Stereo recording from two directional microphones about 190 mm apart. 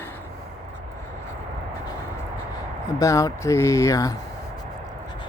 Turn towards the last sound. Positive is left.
turn(degrees=15)  # may be behind; listen again after turning